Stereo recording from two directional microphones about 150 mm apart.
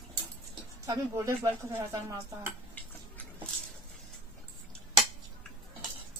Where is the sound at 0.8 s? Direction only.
20° right (ahead or behind).